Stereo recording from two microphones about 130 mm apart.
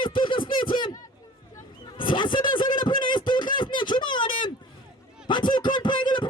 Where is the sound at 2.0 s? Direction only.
35° left (ahead or behind).